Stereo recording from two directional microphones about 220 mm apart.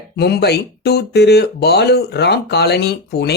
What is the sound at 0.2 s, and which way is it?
Speech, 45° left (ahead or behind).